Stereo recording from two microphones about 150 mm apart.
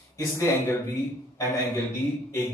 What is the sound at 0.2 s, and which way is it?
Speech, 20° left (ahead or behind).